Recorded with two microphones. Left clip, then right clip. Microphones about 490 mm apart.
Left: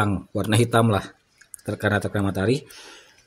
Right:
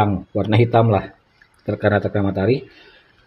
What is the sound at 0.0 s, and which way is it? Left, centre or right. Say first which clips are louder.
Speech: right 5 dB; left.